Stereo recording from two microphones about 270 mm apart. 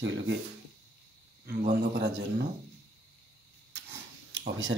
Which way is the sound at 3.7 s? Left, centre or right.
Right.